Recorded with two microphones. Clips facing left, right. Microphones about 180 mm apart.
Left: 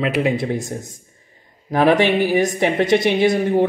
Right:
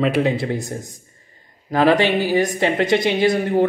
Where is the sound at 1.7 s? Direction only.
20° left (ahead or behind).